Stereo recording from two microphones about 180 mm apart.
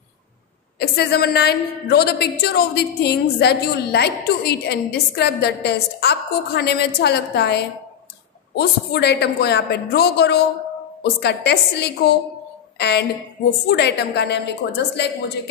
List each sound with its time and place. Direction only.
0.7 s a woman's voice: 65° left (ahead or behind)